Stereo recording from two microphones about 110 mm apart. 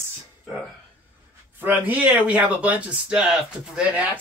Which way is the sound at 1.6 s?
15° right (ahead or behind).